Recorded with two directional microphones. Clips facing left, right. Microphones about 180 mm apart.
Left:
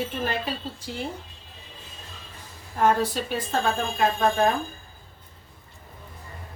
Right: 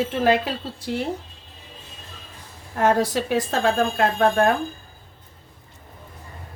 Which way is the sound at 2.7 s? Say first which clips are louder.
Right 3 dB; 80° right.